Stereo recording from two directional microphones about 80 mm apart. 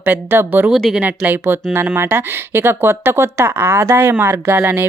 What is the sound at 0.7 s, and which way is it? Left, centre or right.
Speech, centre.